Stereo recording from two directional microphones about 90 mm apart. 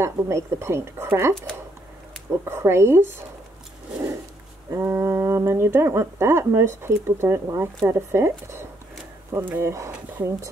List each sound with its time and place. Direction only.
0.0 s speech: 30° right (ahead or behind)
2.4 s speech: 30° right (ahead or behind)
4.7 s speech: 30° right (ahead or behind)